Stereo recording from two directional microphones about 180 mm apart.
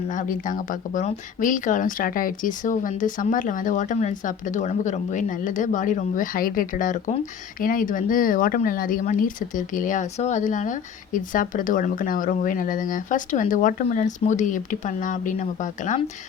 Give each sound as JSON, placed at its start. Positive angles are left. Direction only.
{"t": 0.1, "sound": "speech", "side_deg": 45}